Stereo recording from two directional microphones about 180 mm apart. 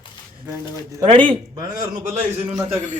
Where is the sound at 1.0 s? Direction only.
25° right (ahead or behind).